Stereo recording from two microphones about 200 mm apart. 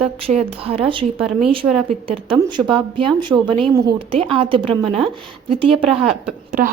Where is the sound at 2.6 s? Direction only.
25° right (ahead or behind).